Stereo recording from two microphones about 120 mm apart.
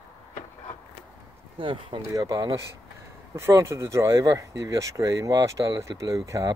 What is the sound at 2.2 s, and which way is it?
Speech, 30° right (ahead or behind).